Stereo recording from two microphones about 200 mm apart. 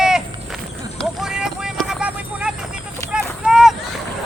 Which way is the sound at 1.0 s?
Centre (ahead or behind).